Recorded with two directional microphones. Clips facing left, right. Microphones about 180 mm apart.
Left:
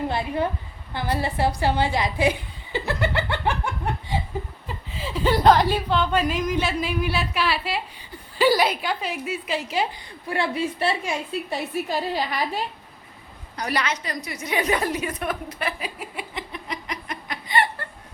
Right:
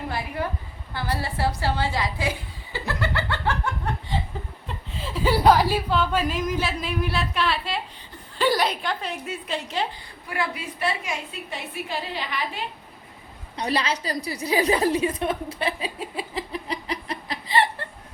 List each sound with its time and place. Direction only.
0.1 s a woman's voice: 25° left (ahead or behind)
4.7 s speech: centre (ahead or behind)
10.2 s a woman's voice: 30° left (ahead or behind)
11.5 s a woman's voice: 40° left (ahead or behind)
13.6 s a woman's voice: 30° right (ahead or behind)